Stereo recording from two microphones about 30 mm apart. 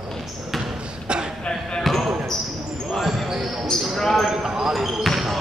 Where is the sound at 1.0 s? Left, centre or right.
Right.